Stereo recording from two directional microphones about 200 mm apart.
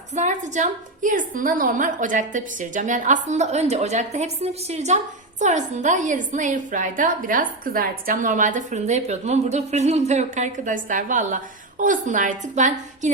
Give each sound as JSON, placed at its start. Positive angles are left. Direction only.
{"t": 0.1, "sound": "a woman's voice", "side_deg": -35}